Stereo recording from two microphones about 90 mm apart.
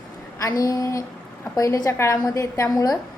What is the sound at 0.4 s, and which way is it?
A woman's voice, 40° left (ahead or behind).